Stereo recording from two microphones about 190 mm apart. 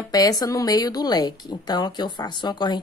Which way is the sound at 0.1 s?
20° left (ahead or behind).